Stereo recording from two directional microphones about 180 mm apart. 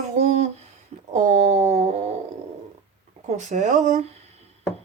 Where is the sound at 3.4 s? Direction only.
40° right (ahead or behind).